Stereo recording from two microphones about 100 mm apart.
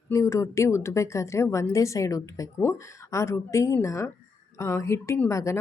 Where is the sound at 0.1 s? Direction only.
30° left (ahead or behind).